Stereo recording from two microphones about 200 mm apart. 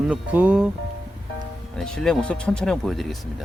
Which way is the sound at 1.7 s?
5° left (ahead or behind).